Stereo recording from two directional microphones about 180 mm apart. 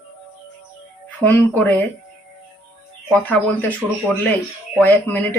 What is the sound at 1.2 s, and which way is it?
Speech, 10° left (ahead or behind).